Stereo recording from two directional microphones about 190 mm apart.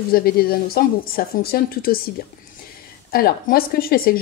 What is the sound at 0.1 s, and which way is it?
Speech, 50° left (ahead or behind).